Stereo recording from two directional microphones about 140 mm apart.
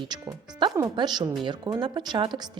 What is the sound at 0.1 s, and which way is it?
Speech, 30° right (ahead or behind).